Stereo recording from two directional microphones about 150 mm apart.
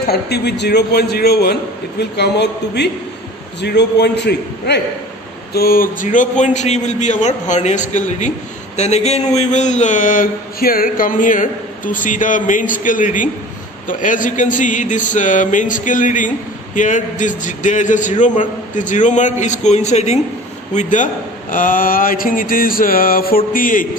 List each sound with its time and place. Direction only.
0.0 s a man's voice: 90° left; by 23.9 s 65° left (ahead or behind)